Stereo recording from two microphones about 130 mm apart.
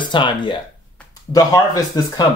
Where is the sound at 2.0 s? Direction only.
30° left (ahead or behind).